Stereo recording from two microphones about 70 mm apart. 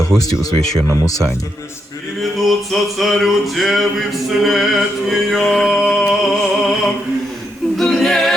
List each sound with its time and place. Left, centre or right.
0.2 s speech: left
2.4 s a sound: centre
7.8 s a capella: centre